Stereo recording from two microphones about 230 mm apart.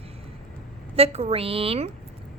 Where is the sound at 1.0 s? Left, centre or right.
Right.